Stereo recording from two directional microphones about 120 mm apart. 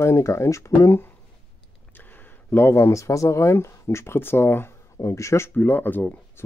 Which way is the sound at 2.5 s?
20° left (ahead or behind).